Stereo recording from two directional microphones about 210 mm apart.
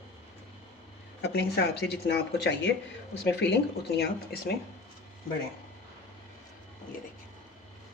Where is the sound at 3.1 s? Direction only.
55° left (ahead or behind).